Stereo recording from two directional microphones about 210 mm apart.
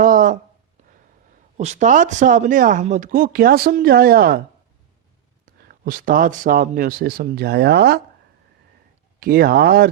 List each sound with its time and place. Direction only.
0.0 s a sound: 40° right (ahead or behind)
1.5 s speech: 35° right (ahead or behind)
5.6 s speech: 40° right (ahead or behind)
9.2 s speech: 45° right (ahead or behind)